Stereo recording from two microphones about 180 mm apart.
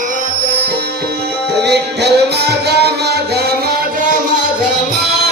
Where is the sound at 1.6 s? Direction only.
65° right (ahead or behind).